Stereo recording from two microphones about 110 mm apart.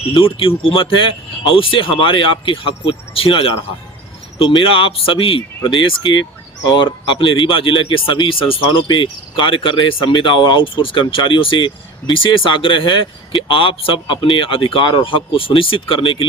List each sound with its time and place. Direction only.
0.3 s speech: 55° left (ahead or behind)